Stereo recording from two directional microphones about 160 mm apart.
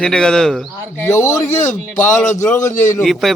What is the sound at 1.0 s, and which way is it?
Speech, 20° left (ahead or behind).